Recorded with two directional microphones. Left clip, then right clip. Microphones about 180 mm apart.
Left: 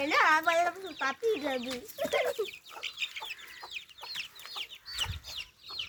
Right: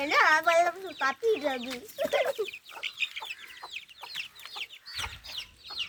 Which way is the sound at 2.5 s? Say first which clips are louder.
Right 3 dB; 45° left (ahead or behind).